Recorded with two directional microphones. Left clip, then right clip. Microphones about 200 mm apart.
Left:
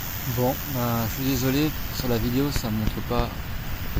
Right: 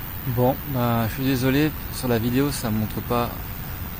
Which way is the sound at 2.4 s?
10° right (ahead or behind).